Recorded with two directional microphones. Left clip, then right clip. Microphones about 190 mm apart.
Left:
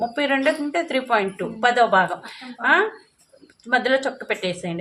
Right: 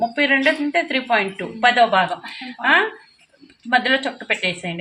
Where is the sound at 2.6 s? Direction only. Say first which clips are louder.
Right 2 dB; 25° left (ahead or behind).